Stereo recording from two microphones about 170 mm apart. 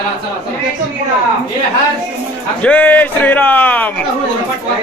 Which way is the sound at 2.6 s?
10° left (ahead or behind).